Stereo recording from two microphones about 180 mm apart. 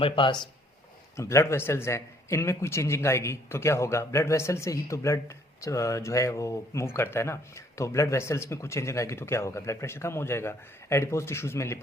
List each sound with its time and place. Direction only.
0.0 s speech: 25° left (ahead or behind)
1.1 s speech: 15° left (ahead or behind)